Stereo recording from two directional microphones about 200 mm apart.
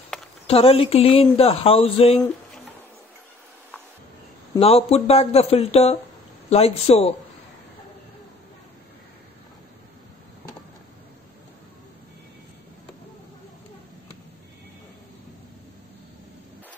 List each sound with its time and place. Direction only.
0.5 s speech: 30° left (ahead or behind)
2.1 s a sound: 5° left (ahead or behind)
4.6 s speech: 30° left (ahead or behind)